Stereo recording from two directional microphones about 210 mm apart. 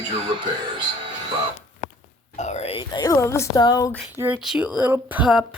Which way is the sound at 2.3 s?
35° left (ahead or behind).